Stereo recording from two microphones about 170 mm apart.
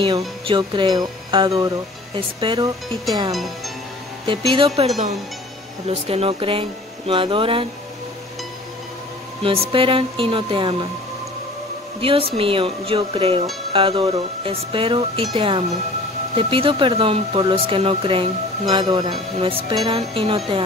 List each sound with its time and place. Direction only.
0.5 s speech: 30° right (ahead or behind)
3.3 s speech: centre (ahead or behind)
4.3 s speech: 30° right (ahead or behind)
9.4 s speech: 35° right (ahead or behind)
12.0 s speech: 35° right (ahead or behind)